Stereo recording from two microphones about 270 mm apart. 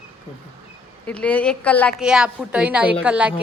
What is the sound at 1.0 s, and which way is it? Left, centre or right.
A woman's voice, centre.